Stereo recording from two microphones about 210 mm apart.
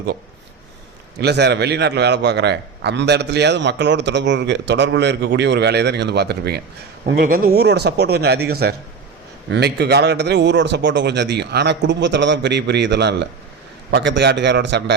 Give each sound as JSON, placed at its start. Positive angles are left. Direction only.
{"t": 1.2, "sound": "a man's voice", "side_deg": -50}